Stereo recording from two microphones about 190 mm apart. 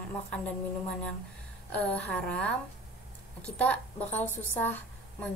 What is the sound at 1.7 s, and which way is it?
A woman's voice, 5° left (ahead or behind).